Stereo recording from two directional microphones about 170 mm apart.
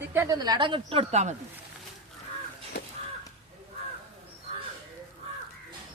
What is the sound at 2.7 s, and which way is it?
Crow, 75° left (ahead or behind).